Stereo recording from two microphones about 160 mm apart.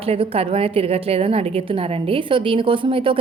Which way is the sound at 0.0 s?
40° right (ahead or behind).